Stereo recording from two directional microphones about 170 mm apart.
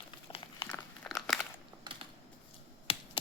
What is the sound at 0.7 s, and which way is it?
Crumpling, 5° left (ahead or behind).